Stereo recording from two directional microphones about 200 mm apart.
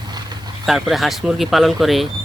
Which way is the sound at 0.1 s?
20° right (ahead or behind).